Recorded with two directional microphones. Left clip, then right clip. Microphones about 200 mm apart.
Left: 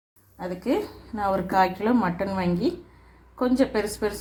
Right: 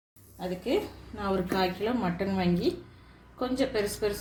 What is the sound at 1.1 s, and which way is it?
A woman's voice, 40° left (ahead or behind).